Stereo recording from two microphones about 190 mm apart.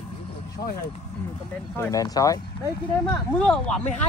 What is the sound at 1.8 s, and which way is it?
Speech, 20° left (ahead or behind).